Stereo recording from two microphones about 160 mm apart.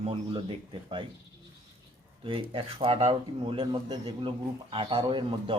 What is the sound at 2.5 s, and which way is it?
A man's voice, 35° right (ahead or behind).